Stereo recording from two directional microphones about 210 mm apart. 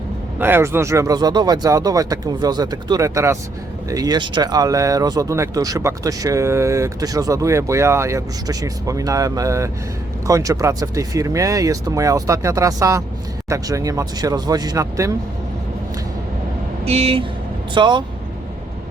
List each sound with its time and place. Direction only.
0.3 s speech: 10° right (ahead or behind)
16.8 s speech: 30° right (ahead or behind)